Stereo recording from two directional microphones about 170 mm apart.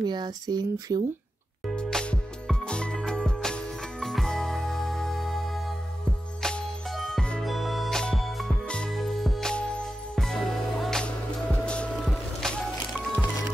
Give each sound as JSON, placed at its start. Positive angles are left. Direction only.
{"t": 0.0, "sound": "speech", "side_deg": -25}
{"t": 1.8, "sound": "music", "side_deg": 5}
{"t": 6.4, "sound": "music", "side_deg": 0}